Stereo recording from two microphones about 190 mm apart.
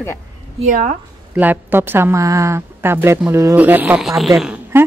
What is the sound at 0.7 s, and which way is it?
Speech, 45° right (ahead or behind).